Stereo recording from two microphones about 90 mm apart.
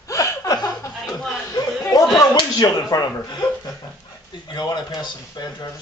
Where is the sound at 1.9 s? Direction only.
45° left (ahead or behind).